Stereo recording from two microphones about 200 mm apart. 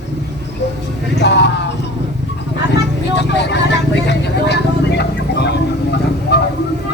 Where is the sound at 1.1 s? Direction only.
60° left (ahead or behind).